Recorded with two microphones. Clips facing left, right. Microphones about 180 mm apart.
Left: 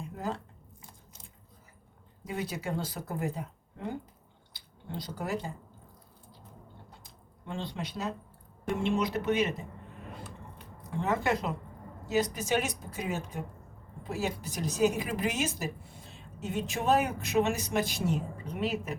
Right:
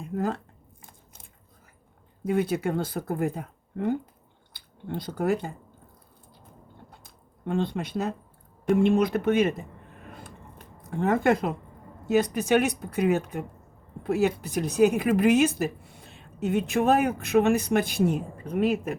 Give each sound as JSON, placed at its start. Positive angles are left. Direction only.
{"t": 0.0, "sound": "a sound", "side_deg": -55}
{"t": 0.8, "sound": "biting", "side_deg": -55}
{"t": 2.2, "sound": "speech", "side_deg": -55}
{"t": 7.0, "sound": "squish", "side_deg": -55}
{"t": 8.7, "sound": "speech", "side_deg": -55}
{"t": 10.1, "sound": "a sound", "side_deg": -50}
{"t": 12.0, "sound": "speech", "side_deg": -55}